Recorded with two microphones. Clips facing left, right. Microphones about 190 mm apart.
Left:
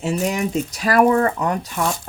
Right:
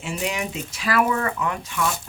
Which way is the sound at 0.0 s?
40° left (ahead or behind).